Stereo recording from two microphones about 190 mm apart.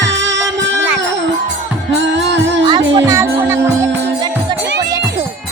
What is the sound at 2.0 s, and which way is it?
Music, 70° right (ahead or behind).